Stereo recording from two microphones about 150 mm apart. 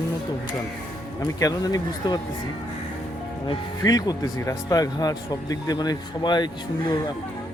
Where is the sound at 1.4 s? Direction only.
25° left (ahead or behind).